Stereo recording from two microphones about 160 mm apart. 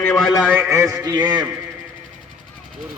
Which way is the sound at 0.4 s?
10° right (ahead or behind).